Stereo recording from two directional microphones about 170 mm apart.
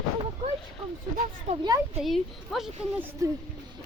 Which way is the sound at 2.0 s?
Centre (ahead or behind).